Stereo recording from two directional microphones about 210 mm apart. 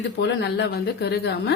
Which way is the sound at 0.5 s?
50° left (ahead or behind).